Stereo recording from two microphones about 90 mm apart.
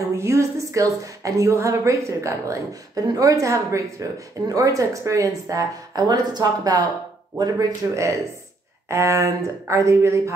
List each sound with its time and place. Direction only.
0.1 s speech: 30° right (ahead or behind)